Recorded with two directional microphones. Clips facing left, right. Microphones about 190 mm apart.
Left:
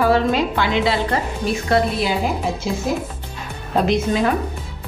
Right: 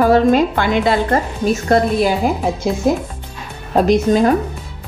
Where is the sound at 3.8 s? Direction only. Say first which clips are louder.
Right 6 dB; 40° right (ahead or behind).